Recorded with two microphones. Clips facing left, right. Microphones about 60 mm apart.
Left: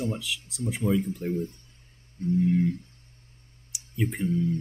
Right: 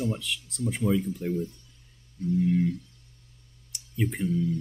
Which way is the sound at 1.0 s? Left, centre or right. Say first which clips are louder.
Even; left.